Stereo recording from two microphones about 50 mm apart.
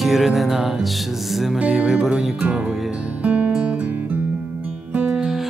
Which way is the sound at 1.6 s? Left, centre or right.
Centre.